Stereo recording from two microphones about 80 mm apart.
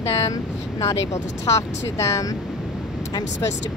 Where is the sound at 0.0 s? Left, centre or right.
Left.